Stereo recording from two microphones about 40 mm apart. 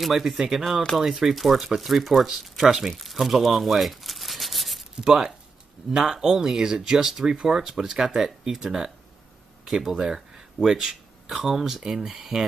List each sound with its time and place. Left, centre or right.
0.0 s speech: centre
2.9 s rub: centre
5.0 s speech: centre